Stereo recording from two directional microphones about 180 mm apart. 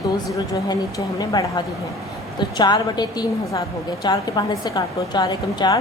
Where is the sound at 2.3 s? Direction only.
25° left (ahead or behind).